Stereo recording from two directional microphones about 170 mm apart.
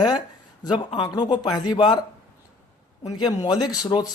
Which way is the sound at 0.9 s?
25° left (ahead or behind).